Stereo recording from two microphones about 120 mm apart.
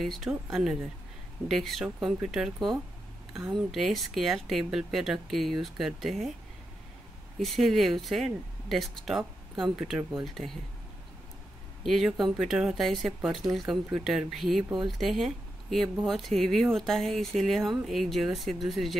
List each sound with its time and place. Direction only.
0.0 s speech: centre (ahead or behind)
7.3 s speech: centre (ahead or behind)
11.8 s speech: centre (ahead or behind)